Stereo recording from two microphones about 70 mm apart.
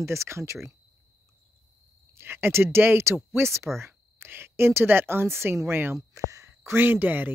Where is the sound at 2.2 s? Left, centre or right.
Right.